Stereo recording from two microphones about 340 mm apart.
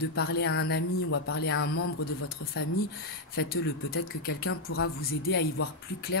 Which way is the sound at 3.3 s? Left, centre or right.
Left.